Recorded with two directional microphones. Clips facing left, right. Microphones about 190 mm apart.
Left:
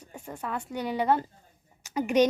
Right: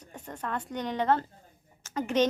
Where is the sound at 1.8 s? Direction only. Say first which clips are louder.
Left 3 dB; 10° left (ahead or behind).